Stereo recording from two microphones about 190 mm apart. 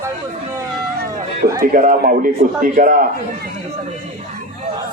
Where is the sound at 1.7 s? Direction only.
45° right (ahead or behind).